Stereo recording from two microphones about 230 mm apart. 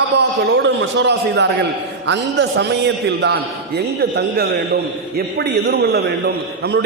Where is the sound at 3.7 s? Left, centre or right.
Right.